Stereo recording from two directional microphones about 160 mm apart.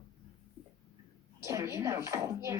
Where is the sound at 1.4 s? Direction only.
20° right (ahead or behind).